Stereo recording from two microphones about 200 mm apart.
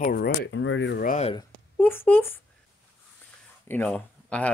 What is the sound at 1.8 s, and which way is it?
Speech, 10° left (ahead or behind).